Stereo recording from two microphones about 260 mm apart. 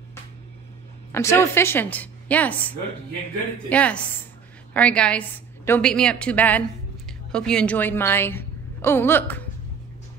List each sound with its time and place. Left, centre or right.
1.1 s a woman's voice: centre